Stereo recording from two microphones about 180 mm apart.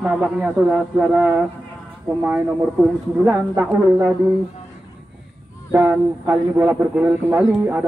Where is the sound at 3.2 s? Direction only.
15° right (ahead or behind).